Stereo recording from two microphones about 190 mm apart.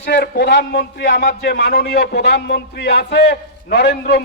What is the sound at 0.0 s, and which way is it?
Speech, 65° left (ahead or behind).